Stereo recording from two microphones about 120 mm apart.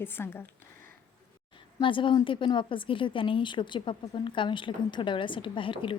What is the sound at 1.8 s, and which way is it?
A woman's voice, 45° left (ahead or behind).